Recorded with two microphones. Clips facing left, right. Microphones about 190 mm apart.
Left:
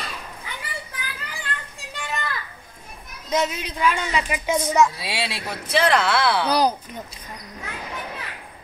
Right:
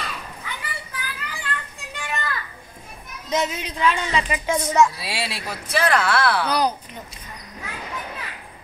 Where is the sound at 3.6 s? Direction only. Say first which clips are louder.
Right 1 dB; 5° left (ahead or behind).